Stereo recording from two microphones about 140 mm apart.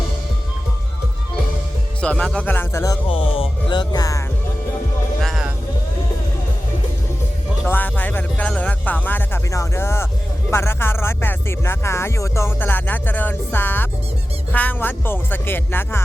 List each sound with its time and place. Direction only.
2.0 s speech: 10° left (ahead or behind)
3.1 s music: 40° left (ahead or behind); by 4.2 s 25° left (ahead or behind)
5.2 s vehicle: centre (ahead or behind)
7.7 s speech: 10° left (ahead or behind)